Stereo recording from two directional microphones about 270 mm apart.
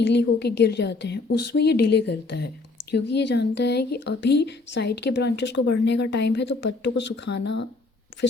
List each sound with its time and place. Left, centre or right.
0.0 s speech: left